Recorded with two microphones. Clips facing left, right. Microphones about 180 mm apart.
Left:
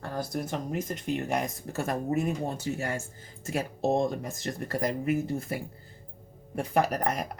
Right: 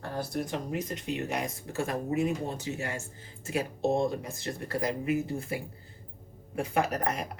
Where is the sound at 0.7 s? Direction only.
45° left (ahead or behind).